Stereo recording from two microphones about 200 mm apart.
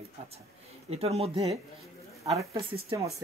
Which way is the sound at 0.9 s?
30° right (ahead or behind).